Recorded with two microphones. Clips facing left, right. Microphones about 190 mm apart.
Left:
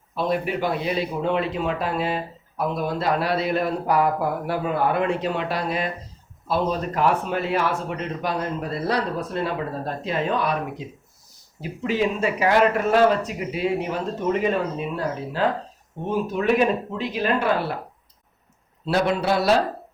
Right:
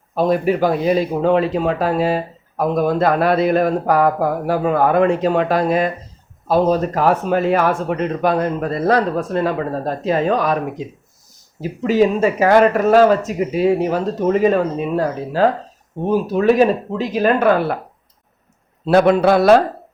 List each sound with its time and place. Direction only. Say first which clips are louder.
0.1 s a man's voice: right 8 dB; 45° right (ahead or behind)
18.9 s a man's voice: right 9 dB; 55° right (ahead or behind)